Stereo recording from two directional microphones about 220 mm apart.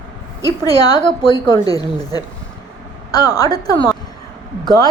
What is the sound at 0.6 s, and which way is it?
A woman's voice, 15° left (ahead or behind).